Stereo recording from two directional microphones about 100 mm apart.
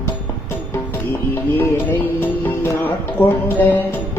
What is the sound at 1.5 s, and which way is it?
Music, 20° left (ahead or behind).